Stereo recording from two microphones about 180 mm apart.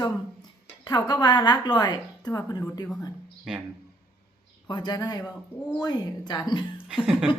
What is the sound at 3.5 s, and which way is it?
Speech, 5° right (ahead or behind).